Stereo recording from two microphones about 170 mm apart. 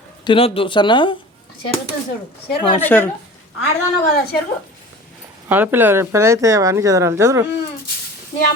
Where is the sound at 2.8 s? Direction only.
10° left (ahead or behind).